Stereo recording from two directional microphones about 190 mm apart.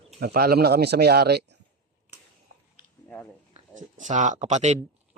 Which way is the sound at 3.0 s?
10° left (ahead or behind).